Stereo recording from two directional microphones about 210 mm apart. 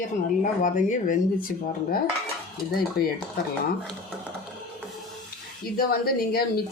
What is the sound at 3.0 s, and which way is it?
Speech, 50° left (ahead or behind).